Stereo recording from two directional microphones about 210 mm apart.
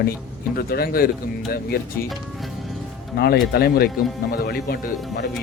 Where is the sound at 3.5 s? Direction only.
50° left (ahead or behind).